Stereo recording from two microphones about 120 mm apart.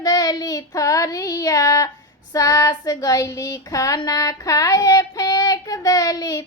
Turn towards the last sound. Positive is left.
turn(degrees=30)  # may be behind; listen again after turning